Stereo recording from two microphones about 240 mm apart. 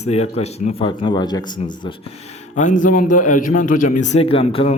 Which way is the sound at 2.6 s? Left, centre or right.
Left.